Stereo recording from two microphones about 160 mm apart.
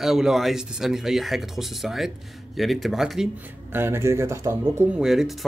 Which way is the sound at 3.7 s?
15° right (ahead or behind).